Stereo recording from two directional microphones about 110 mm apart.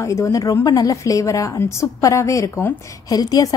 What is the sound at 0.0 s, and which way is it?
A woman's voice, 30° left (ahead or behind).